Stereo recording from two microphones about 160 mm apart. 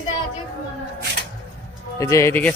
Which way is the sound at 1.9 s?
20° left (ahead or behind).